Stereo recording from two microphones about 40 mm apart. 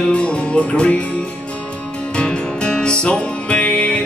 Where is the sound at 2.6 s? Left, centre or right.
Left.